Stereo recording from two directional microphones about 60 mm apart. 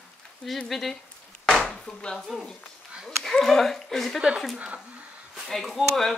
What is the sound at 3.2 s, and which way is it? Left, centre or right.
Speech, centre.